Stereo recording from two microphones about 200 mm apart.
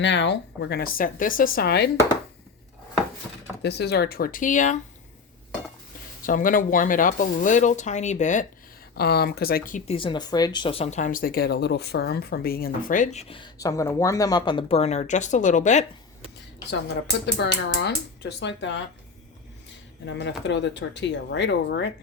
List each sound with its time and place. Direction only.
0.0 s speech: 65° left (ahead or behind)
3.6 s speech: 55° left (ahead or behind); by 4.8 s 40° left (ahead or behind)
6.2 s speech: 45° left (ahead or behind)
9.0 s speech: 50° left (ahead or behind); by 15.9 s 35° left (ahead or behind)
17.2 s speech: 60° left (ahead or behind)
20.1 s speech: 60° left (ahead or behind)